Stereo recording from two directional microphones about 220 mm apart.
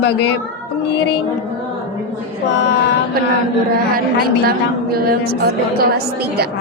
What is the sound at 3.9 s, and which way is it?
A woman's voice, 45° right (ahead or behind).